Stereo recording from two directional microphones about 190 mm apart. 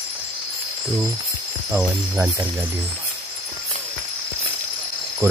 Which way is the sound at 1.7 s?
10° right (ahead or behind).